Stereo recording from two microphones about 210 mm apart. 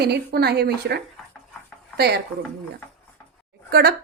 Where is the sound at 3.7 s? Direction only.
50° right (ahead or behind).